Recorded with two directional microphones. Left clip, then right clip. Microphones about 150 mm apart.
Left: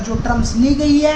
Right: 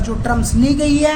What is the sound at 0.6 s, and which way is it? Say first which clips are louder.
Speech: left 1 dB; 55° right (ahead or behind).